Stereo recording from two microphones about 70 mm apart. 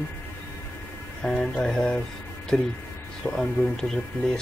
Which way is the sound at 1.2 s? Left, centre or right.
Centre.